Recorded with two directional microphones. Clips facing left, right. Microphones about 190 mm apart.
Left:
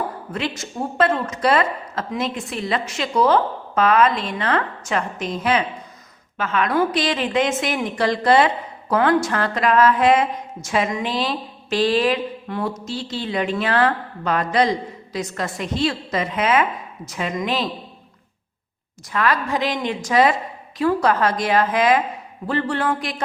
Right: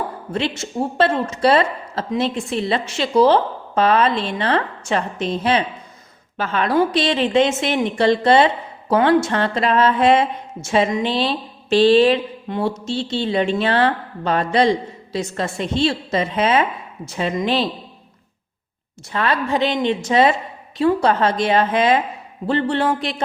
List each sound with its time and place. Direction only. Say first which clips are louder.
0.3 s a woman's voice: right 5 dB; 25° right (ahead or behind)
19.1 s a woman's voice: right 1 dB; 25° right (ahead or behind)